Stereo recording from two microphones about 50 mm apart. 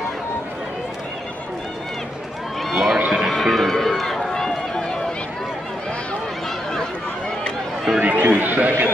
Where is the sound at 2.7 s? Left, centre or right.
Centre.